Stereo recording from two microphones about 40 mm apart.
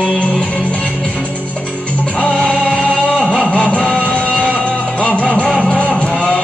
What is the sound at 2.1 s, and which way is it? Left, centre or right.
Music, left.